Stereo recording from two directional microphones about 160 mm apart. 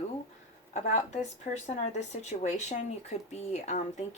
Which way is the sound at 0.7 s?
45° left (ahead or behind).